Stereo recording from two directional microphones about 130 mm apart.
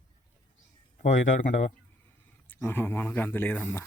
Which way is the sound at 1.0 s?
75° left (ahead or behind).